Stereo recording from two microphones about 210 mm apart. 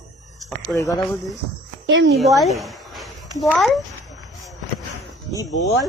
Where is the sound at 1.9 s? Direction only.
60° right (ahead or behind).